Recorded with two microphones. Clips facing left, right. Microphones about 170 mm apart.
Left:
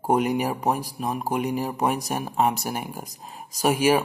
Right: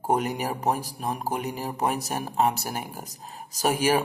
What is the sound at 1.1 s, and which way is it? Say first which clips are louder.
Speech: left 5 dB; 15° left (ahead or behind).